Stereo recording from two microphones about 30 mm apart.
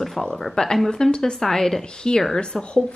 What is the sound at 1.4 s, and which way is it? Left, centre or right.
A woman's voice, centre.